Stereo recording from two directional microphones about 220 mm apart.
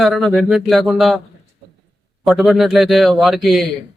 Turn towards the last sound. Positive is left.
turn(degrees=0)  # may be behind; listen again after turning